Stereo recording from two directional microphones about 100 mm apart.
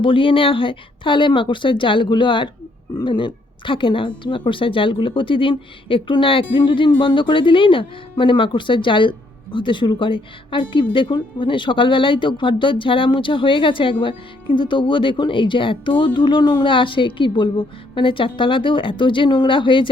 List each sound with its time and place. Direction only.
0.0 s speech: 60° left (ahead or behind)